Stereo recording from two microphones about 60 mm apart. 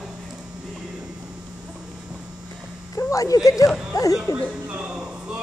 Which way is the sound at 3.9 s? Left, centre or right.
Left.